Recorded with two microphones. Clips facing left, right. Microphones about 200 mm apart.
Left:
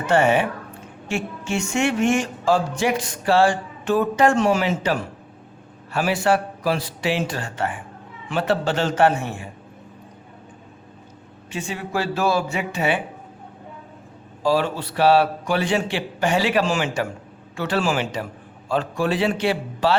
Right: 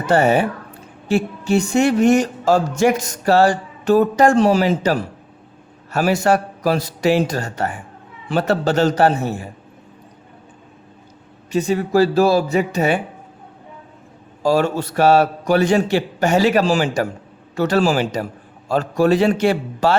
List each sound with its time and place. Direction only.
0.0 s a man's voice: 35° right (ahead or behind)
11.5 s speech: 40° right (ahead or behind)
14.4 s a man's voice: 45° right (ahead or behind)